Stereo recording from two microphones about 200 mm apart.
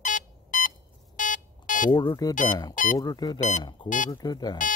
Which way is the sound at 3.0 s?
20° left (ahead or behind).